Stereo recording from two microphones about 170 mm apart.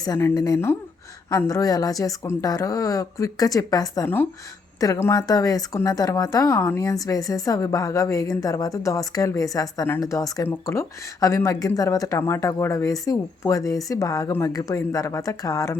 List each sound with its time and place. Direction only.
0.0 s a woman's voice: 20° left (ahead or behind)